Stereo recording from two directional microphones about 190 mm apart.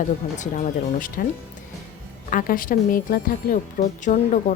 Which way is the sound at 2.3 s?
45° left (ahead or behind).